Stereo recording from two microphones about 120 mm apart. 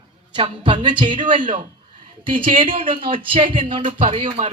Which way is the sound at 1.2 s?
90° right.